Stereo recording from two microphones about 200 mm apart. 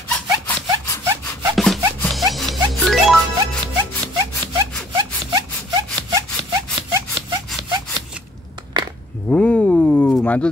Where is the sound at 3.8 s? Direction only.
20° right (ahead or behind).